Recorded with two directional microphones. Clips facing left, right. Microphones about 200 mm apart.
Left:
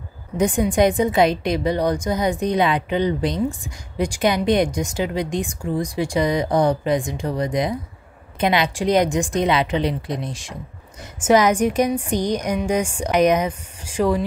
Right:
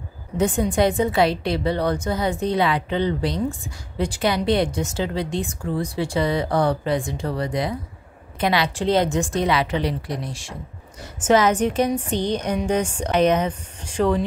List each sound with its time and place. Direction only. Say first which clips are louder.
0.4 s a woman's voice: left 2 dB; 15° left (ahead or behind)